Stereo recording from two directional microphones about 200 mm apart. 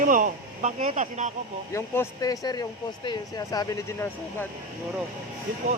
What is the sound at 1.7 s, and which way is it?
A man's voice, 15° left (ahead or behind).